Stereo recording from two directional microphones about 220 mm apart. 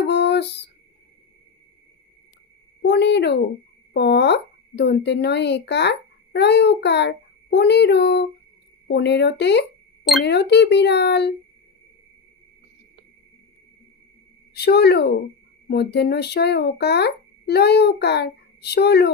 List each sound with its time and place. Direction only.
0.0 s music: 50° left (ahead or behind)
2.8 s a sound: 50° left (ahead or behind)
3.9 s a child's voice: 50° left (ahead or behind)
14.5 s a child's voice: 50° left (ahead or behind)